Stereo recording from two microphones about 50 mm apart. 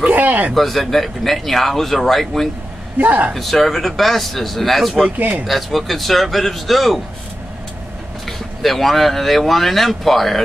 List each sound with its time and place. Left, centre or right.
0.0 s a sound: right
0.6 s speech: centre
3.0 s a man's voice: right
3.3 s speech: centre
8.3 s speech: centre